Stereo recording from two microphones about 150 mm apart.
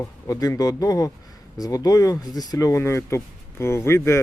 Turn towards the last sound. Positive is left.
turn(degrees=15)  # may be behind; listen again after turning